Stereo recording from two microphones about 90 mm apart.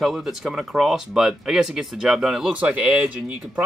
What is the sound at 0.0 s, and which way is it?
Speech, 5° right (ahead or behind).